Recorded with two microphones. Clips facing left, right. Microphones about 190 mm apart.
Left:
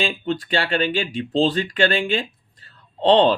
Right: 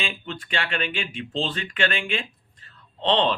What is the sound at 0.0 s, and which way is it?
Speech, 35° left (ahead or behind).